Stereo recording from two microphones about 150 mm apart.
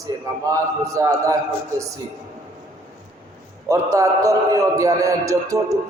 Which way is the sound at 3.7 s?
20° right (ahead or behind).